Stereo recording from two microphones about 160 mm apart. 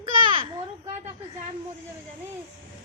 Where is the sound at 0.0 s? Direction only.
30° right (ahead or behind).